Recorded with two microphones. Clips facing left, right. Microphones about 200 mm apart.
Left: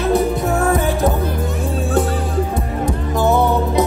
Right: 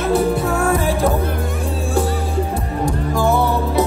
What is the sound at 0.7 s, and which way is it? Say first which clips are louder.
Music: left 1 dB; 20° left (ahead or behind).